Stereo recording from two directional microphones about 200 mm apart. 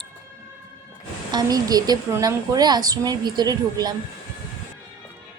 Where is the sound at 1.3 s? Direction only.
20° right (ahead or behind).